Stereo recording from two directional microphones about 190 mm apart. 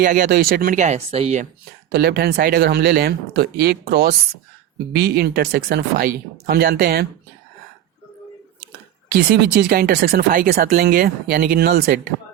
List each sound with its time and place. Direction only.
0.0 s speech: 45° right (ahead or behind)
1.9 s speech: 55° right (ahead or behind)
9.1 s speech: 55° right (ahead or behind)